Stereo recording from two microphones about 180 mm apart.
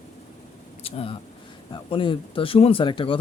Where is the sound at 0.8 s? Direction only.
35° left (ahead or behind).